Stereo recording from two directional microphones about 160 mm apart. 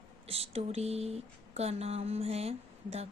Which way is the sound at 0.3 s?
40° right (ahead or behind).